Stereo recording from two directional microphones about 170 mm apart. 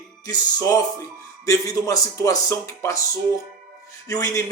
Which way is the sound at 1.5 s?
15° left (ahead or behind).